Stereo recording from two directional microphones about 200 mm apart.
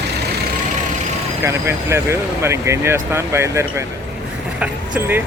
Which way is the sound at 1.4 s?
15° right (ahead or behind).